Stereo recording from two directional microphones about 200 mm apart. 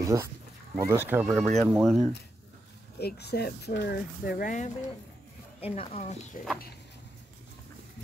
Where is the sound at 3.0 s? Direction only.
55° left (ahead or behind).